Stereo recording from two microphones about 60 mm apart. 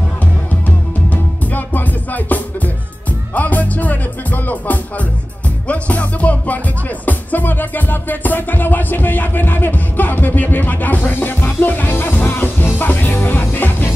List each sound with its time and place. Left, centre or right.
0.7 s music: left